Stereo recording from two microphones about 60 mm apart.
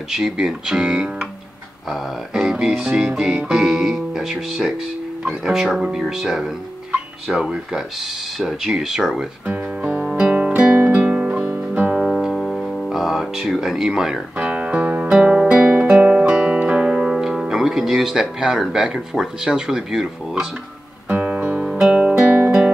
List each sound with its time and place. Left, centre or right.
0.1 s speech: centre
9.5 s music: right
10.0 s music: centre
10.5 s music: right
12.0 s music: centre
14.4 s music: right; by 18.2 s centre
18.2 s speech: centre
21.1 s guitar: right
21.6 s music: centre